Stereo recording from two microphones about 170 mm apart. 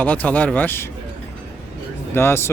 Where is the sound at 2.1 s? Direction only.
15° left (ahead or behind).